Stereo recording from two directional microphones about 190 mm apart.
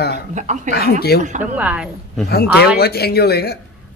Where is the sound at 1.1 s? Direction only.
55° left (ahead or behind).